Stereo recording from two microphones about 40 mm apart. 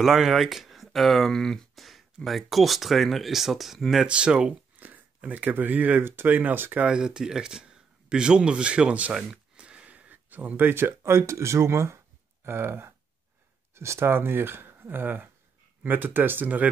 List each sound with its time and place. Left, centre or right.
0.0 s speech: centre
1.8 s speech: centre
4.1 s speech: right
4.7 s speech: right
6.9 s speech: right
9.1 s a sound: right
10.7 s speech: right
12.4 s speech: right